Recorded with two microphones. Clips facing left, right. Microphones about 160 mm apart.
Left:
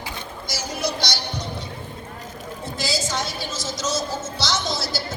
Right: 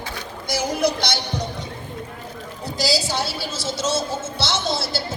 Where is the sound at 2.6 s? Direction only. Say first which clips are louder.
Right 4 dB; 35° right (ahead or behind).